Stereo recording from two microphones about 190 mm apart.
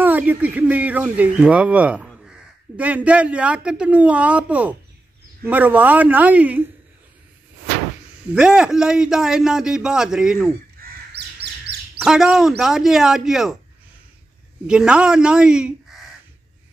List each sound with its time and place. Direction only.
0.0 s speech: 10° right (ahead or behind)
2.0 s crow: centre (ahead or behind)
2.8 s speech: 5° right (ahead or behind)
8.4 s a man's voice: 5° right (ahead or behind)
10.8 s fowl: 50° right (ahead or behind)
12.0 s a man's voice: 5° right (ahead or behind)
14.7 s a man's voice: 5° right (ahead or behind)